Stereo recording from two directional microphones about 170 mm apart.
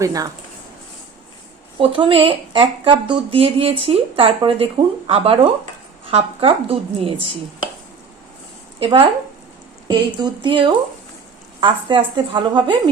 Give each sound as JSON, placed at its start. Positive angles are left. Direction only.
{"t": 0.0, "sound": "a woman's voice", "side_deg": -20}
{"t": 1.8, "sound": "speech", "side_deg": -30}
{"t": 8.8, "sound": "a woman's voice", "side_deg": -30}